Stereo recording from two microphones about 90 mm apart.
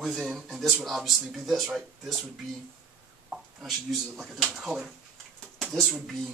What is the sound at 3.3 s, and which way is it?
Speech, centre (ahead or behind).